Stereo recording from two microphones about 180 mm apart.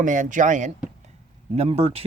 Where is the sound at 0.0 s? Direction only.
45° right (ahead or behind).